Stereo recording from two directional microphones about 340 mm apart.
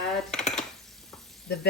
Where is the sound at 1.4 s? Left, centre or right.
Left.